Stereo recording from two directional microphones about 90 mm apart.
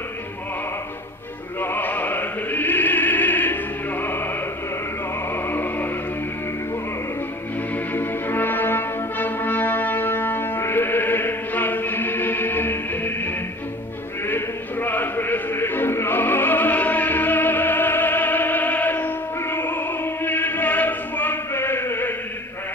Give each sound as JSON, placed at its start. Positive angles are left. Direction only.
{"t": 1.6, "sound": "opera", "side_deg": 20}
{"t": 5.3, "sound": "music", "side_deg": 25}
{"t": 7.9, "sound": "brass instrument", "side_deg": 20}
{"t": 14.2, "sound": "music", "side_deg": 20}
{"t": 20.2, "sound": "chant", "side_deg": 20}